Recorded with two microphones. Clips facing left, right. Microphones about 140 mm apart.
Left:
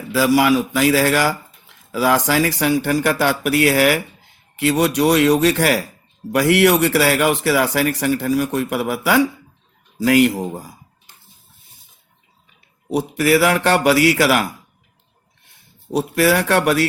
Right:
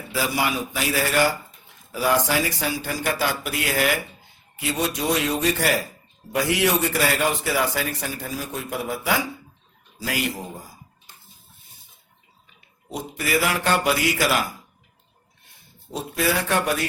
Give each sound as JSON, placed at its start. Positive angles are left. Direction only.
{"t": 0.1, "sound": "speech", "side_deg": 90}
{"t": 6.3, "sound": "speech", "side_deg": 75}
{"t": 10.0, "sound": "speech", "side_deg": 70}
{"t": 12.9, "sound": "speech", "side_deg": 75}
{"t": 15.9, "sound": "speech", "side_deg": 75}